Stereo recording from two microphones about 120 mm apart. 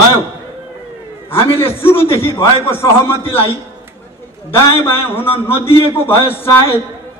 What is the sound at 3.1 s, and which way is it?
Speech, 50° left (ahead or behind).